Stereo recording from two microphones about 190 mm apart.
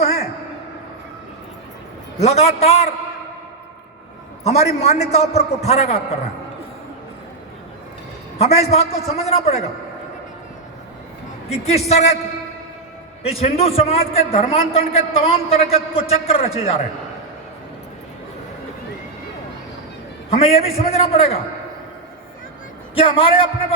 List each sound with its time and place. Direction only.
0.0 s a sound: 35° left (ahead or behind)
2.1 s a man's voice: 35° left (ahead or behind)
4.4 s a man's voice: 35° left (ahead or behind)
8.4 s a man's voice: 35° left (ahead or behind)
11.4 s a man's voice: 35° left (ahead or behind)
13.2 s a man's voice: 30° left (ahead or behind)
20.3 s a man's voice: 30° left (ahead or behind)
23.0 s a man's voice: 30° left (ahead or behind)